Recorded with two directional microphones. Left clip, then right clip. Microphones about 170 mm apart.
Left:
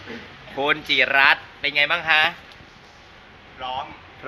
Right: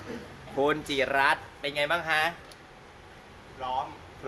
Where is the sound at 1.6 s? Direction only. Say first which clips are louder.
Left 8 dB; centre (ahead or behind).